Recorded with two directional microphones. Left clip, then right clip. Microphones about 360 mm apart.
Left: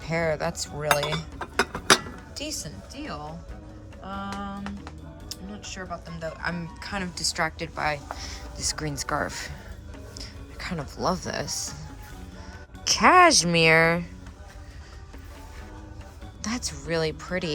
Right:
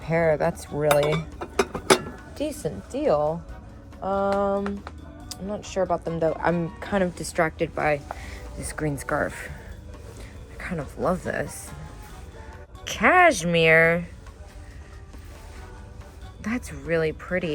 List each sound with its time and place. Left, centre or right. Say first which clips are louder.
0.0 s speech: right 5 dB; centre
0.6 s cutlery: right 4 dB; centre
2.9 s speech: right 15 dB; centre
4.0 s a sound: right 12 dB; right
5.3 s speech: right 9 dB; centre
10.2 s music: left 1 dB; centre
11.0 s speech: right 2 dB; centre
13.0 s speech: left 1 dB; centre
16.4 s speech: even; centre